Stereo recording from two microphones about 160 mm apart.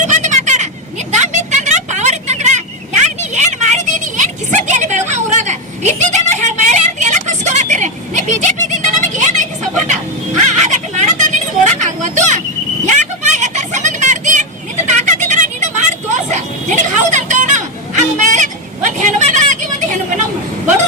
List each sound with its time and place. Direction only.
0.0 s vehicle: 50° right (ahead or behind)
15.3 s a sound: 50° right (ahead or behind)
16.3 s bow-wow: 50° right (ahead or behind)
18.2 s vehicle: 50° right (ahead or behind)